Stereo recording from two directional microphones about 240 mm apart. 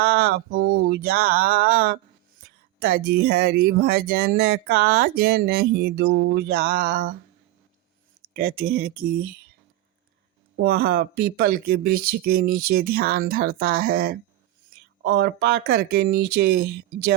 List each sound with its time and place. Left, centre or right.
0.0 s mantra: right
2.4 s speech: right
8.3 s speech: right
10.6 s speech: right